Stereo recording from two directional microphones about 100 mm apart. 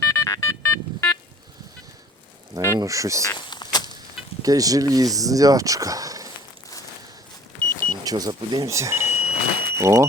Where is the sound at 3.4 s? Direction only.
50° left (ahead or behind).